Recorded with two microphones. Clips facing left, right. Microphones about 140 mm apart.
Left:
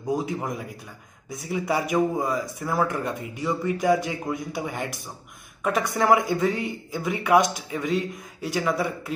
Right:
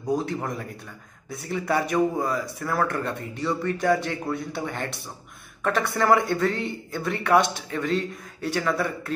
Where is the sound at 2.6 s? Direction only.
10° left (ahead or behind).